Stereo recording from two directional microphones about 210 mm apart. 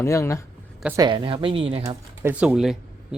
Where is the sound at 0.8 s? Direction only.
15° right (ahead or behind).